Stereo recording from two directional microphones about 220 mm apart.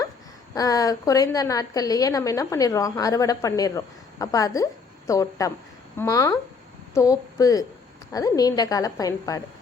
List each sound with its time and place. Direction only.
0.5 s a woman's voice: 15° left (ahead or behind)